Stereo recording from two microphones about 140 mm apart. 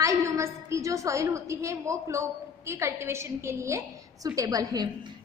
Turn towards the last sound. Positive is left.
turn(degrees=-30)  # may be behind; listen again after turning